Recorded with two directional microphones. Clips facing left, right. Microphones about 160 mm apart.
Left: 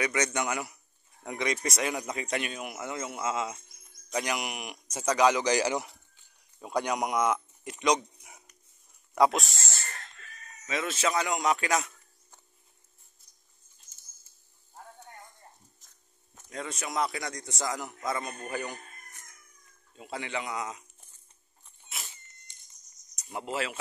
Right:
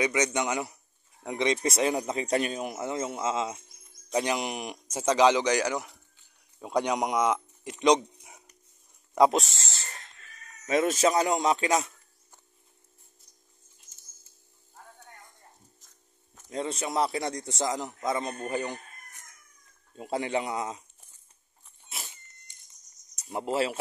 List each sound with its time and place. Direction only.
0.0 s a man's voice: 15° right (ahead or behind)
5.4 s a man's voice: 10° left (ahead or behind)
6.7 s speech: 15° right (ahead or behind)
10.7 s speech: 45° right (ahead or behind); by 11.9 s 25° right (ahead or behind)
16.4 s a man's voice: 25° right (ahead or behind)
20.0 s speech: 40° right (ahead or behind)
23.3 s speech: 35° right (ahead or behind)